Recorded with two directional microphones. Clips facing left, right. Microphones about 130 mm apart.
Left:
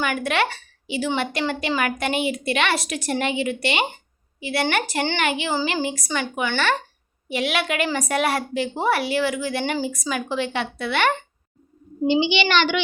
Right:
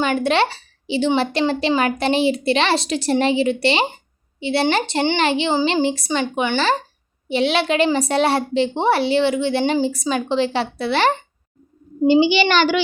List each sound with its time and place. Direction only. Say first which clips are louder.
0.0 s a woman's voice: right 5 dB; 30° right (ahead or behind)
12.0 s a child's voice: right 5 dB; 45° right (ahead or behind)